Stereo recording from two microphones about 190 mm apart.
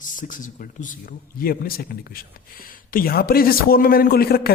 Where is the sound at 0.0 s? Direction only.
45° left (ahead or behind).